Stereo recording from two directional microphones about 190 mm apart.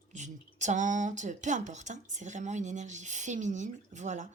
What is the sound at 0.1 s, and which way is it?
Speech, 40° right (ahead or behind).